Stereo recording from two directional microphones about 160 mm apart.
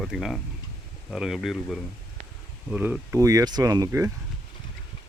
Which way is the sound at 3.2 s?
20° right (ahead or behind).